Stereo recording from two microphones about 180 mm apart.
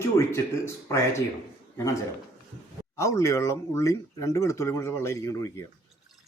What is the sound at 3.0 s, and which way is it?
Speech, 15° left (ahead or behind).